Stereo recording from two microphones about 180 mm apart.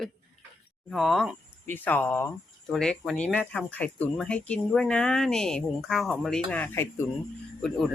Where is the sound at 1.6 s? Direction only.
10° left (ahead or behind).